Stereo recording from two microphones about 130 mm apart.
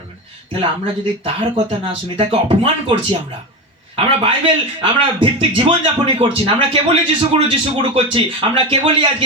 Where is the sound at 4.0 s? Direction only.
50° right (ahead or behind).